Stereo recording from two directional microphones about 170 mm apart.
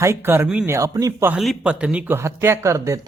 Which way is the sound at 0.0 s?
15° right (ahead or behind).